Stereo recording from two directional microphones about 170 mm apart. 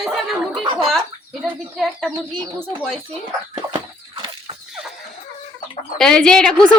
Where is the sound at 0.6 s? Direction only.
30° right (ahead or behind).